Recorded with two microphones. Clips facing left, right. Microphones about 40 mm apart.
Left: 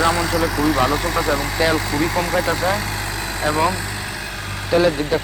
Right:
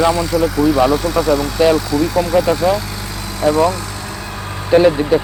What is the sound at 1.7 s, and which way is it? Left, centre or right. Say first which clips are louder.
Speech: right 4 dB; left.